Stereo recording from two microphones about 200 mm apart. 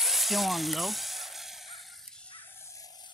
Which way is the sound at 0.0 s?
Centre (ahead or behind).